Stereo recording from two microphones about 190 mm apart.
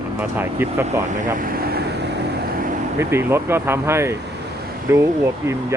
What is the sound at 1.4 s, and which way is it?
Vehicle, 55° right (ahead or behind).